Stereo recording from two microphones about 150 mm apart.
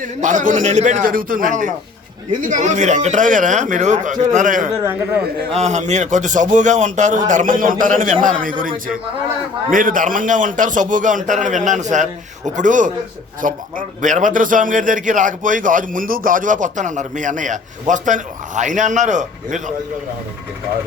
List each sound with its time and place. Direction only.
0.0 s a man's voice: 55° right (ahead or behind)
5.5 s a man's voice: 45° right (ahead or behind)